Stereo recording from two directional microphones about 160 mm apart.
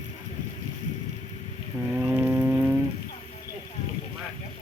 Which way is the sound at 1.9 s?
15° right (ahead or behind).